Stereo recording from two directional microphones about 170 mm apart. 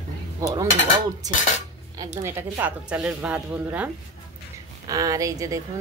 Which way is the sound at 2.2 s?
15° right (ahead or behind).